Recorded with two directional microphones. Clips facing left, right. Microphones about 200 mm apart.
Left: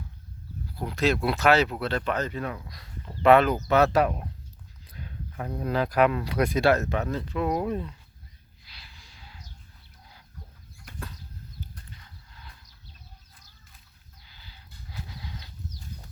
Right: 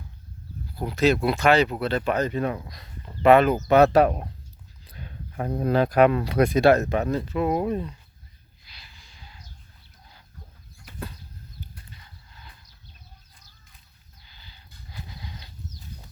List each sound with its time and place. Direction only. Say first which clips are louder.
0.8 s speech: right 4 dB; centre (ahead or behind); by 2.9 s 20° right (ahead or behind)
3.2 s speech: right 2 dB; 5° right (ahead or behind)
3.7 s speech: right 6 dB; 20° right (ahead or behind); by 7.9 s centre (ahead or behind)
8.7 s gasp: even; centre (ahead or behind)
14.3 s a sound: even; 5° left (ahead or behind)